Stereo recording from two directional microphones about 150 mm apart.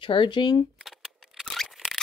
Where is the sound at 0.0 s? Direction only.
35° left (ahead or behind).